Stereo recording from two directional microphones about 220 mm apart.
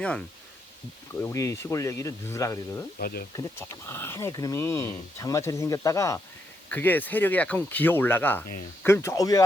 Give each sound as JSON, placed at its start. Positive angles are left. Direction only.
{"t": 0.0, "sound": "speech", "side_deg": 5}
{"t": 3.0, "sound": "speech", "side_deg": 45}
{"t": 3.3, "sound": "speech", "side_deg": 10}